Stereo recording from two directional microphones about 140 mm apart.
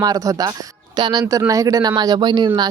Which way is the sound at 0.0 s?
25° right (ahead or behind).